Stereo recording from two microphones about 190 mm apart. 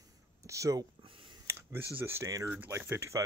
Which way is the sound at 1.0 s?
30° right (ahead or behind).